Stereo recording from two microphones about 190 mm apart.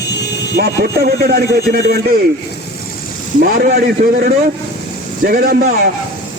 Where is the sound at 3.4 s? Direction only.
55° right (ahead or behind).